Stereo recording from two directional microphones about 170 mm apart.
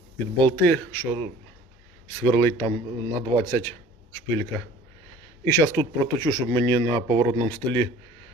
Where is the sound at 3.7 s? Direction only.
10° left (ahead or behind).